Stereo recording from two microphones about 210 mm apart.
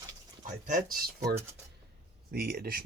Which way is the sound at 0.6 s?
45° right (ahead or behind).